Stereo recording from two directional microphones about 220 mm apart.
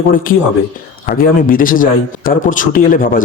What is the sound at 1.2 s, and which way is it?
Speech, 40° left (ahead or behind).